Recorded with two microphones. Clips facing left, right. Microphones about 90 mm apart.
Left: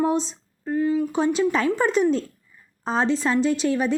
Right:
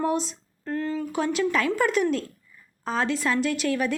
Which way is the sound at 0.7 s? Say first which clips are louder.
Left 6 dB; 15° left (ahead or behind).